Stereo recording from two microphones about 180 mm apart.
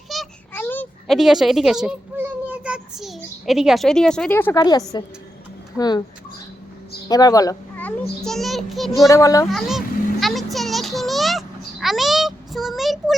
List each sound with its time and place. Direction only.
0.1 s a sound: 5° left (ahead or behind)
4.9 s speech: 25° left (ahead or behind)
7.1 s speech: 20° left (ahead or behind)
7.8 s a child's voice: 5° left (ahead or behind)
9.0 s a child's voice: 20° left (ahead or behind)
9.5 s a sound: centre (ahead or behind)